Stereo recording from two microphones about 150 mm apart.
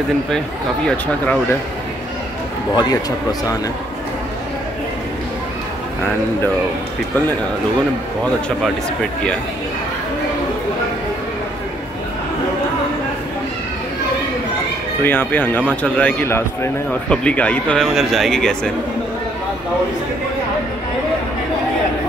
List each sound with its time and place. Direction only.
0.8 s a man's voice: 10° left (ahead or behind)
2.7 s speech: 25° left (ahead or behind)
15.0 s a man's voice: 15° left (ahead or behind)